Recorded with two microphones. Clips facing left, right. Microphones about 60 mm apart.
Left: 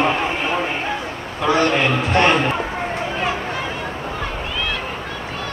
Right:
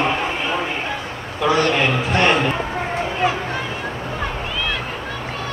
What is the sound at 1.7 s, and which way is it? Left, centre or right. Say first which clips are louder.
Speech: even; centre.